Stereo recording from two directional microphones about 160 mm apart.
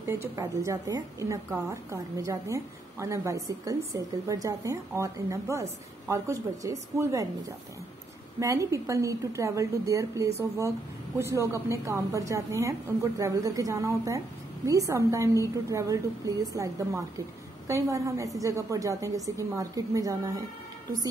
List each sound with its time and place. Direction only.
0.0 s a woman's voice: 15° right (ahead or behind)
8.4 s a woman's voice: 20° right (ahead or behind)